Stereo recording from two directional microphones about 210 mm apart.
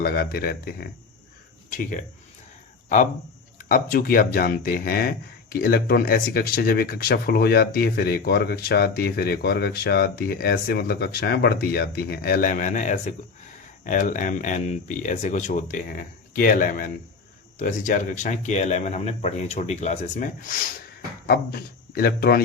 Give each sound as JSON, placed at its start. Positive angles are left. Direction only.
{"t": 0.0, "sound": "speech", "side_deg": 45}
{"t": 3.6, "sound": "speech", "side_deg": 40}
{"t": 21.2, "sound": "a man's voice", "side_deg": 45}